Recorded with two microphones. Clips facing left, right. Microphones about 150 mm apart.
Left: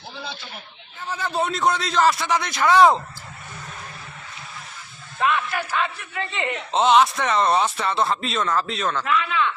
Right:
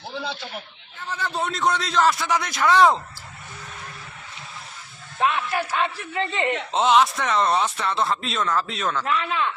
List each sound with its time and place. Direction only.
1.1 s speech: 5° left (ahead or behind)
5.2 s a man's voice: 30° right (ahead or behind)
6.7 s speech: centre (ahead or behind)
9.0 s a man's voice: 35° right (ahead or behind)